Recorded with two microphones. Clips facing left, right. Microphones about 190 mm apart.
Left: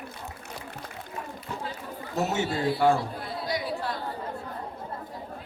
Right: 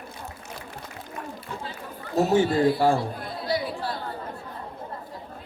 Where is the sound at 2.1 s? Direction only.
30° right (ahead or behind).